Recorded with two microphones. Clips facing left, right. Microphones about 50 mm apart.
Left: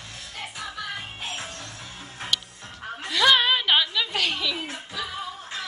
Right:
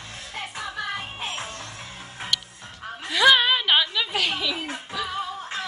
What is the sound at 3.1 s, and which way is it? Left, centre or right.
Chuckle, centre.